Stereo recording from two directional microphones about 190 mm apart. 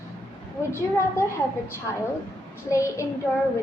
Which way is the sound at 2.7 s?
15° left (ahead or behind).